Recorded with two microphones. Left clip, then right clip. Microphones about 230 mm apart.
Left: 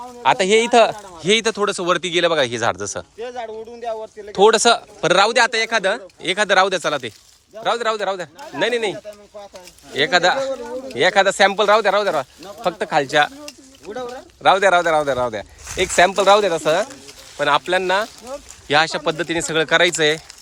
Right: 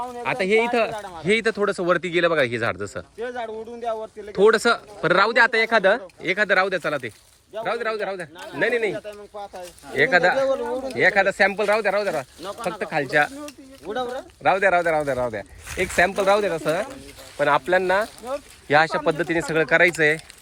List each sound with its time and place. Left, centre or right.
0.2 s speech: centre
3.2 s a man's voice: right
4.4 s speech: centre
6.3 s speech: centre
9.9 s speech: centre
13.9 s speech: centre
14.4 s speech: centre